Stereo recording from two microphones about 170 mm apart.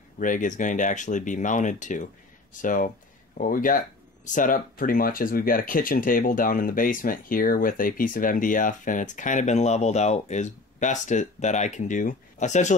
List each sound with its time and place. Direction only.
0.2 s speech: 50° left (ahead or behind)